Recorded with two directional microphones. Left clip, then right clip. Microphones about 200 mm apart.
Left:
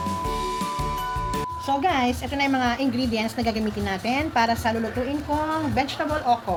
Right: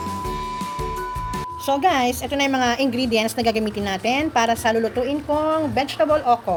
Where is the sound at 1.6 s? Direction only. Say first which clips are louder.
Right 4 dB; 55° right (ahead or behind).